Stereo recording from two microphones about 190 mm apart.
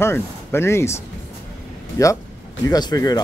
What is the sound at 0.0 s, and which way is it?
Speech, 15° left (ahead or behind).